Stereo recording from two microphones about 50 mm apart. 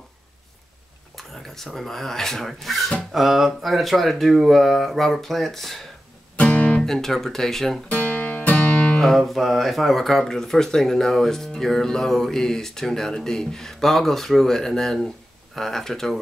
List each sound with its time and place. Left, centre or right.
1.1 s speech: centre
6.4 s guitar: left
6.8 s speech: centre
7.9 s music: left
9.0 s speech: centre